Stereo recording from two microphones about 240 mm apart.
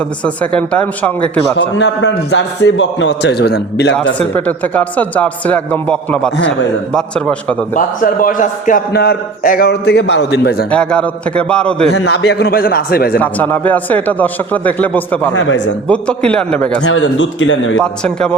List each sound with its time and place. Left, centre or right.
0.5 s a man's voice: centre
1.8 s a man's voice: left
4.4 s a man's voice: centre
6.3 s a man's voice: left
6.9 s a man's voice: centre
7.8 s a man's voice: left
10.7 s a man's voice: centre
11.9 s a man's voice: left
13.1 s a man's voice: centre
15.4 s a man's voice: left
15.9 s a man's voice: centre
16.8 s a man's voice: left
17.7 s a man's voice: centre